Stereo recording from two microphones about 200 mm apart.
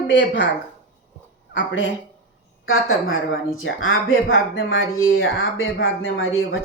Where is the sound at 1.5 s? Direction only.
70° left (ahead or behind).